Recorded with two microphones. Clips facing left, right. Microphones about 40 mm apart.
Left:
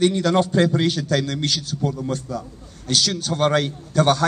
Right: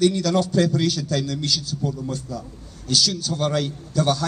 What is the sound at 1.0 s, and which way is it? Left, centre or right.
A man's voice, left.